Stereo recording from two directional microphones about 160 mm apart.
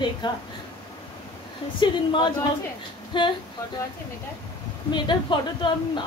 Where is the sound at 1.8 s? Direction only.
30° left (ahead or behind).